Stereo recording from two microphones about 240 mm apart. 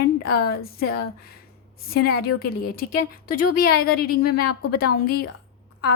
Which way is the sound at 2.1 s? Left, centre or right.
Left.